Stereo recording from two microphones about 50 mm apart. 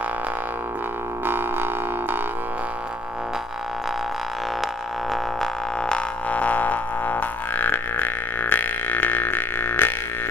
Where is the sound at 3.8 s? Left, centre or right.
Centre.